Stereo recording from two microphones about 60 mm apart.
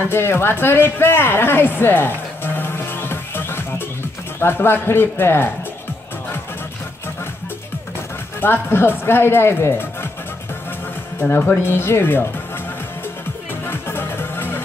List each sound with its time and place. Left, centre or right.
0.0 s a sound: left
4.4 s speech: left
8.4 s speech: left
11.1 s speech: left
13.7 s music: left